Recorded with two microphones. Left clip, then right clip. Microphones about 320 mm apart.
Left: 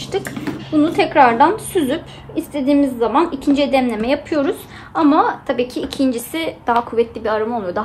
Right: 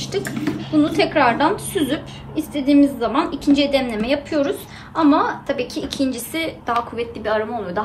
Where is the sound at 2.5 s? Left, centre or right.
Centre.